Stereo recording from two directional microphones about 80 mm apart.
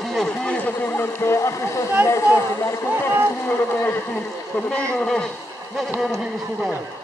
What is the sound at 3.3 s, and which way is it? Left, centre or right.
Speech, left.